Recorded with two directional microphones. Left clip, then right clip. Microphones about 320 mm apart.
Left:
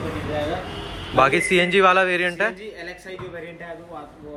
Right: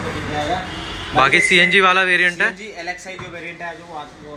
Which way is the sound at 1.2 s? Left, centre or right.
Centre.